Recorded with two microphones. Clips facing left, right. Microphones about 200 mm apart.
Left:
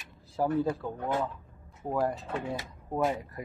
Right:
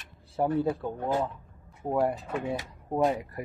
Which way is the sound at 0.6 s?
5° right (ahead or behind).